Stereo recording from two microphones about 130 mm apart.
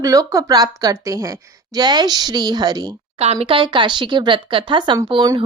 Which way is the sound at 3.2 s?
55° right (ahead or behind).